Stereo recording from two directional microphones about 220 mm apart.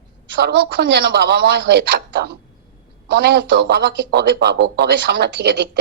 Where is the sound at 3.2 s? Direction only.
50° right (ahead or behind).